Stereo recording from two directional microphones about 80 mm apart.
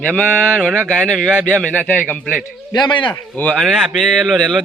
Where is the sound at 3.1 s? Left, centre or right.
Left.